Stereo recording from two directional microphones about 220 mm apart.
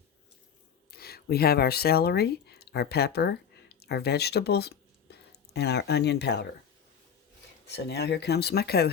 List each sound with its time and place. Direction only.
0.9 s speech: 45° left (ahead or behind)
7.7 s speech: 50° left (ahead or behind)